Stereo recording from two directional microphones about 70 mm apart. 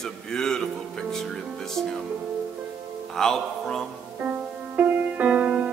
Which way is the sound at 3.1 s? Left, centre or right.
Centre.